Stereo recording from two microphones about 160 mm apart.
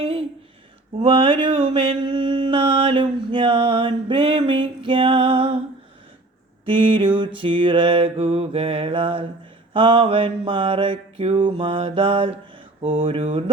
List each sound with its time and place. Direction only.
0.0 s a sound: 35° right (ahead or behind)
0.9 s mantra: 35° right (ahead or behind)
6.7 s mantra: 30° right (ahead or behind)